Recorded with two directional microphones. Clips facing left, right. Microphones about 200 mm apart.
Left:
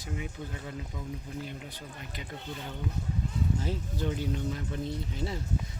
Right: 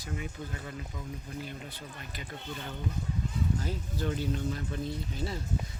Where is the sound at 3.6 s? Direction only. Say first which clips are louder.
Left 1 dB; 25° left (ahead or behind).